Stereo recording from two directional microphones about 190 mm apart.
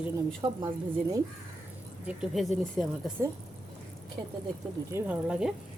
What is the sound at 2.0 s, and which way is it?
Speech, centre (ahead or behind).